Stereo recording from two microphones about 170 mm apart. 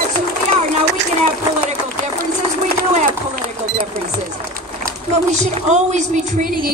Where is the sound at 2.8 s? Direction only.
55° right (ahead or behind).